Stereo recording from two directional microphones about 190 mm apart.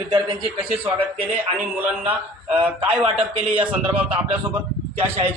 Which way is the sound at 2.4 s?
5° right (ahead or behind).